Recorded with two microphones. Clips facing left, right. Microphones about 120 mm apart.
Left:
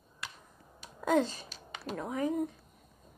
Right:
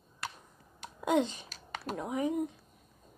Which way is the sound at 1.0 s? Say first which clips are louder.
Even; 20° right (ahead or behind).